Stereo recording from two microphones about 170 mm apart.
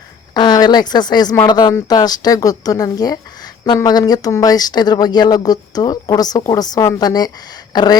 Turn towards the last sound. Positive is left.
turn(degrees=25)  # may be behind; listen again after turning